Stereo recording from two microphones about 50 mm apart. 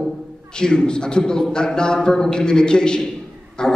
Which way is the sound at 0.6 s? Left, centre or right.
Centre.